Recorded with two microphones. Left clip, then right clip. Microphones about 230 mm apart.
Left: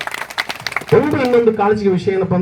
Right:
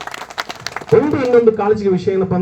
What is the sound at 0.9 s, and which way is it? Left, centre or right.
A man's voice, left.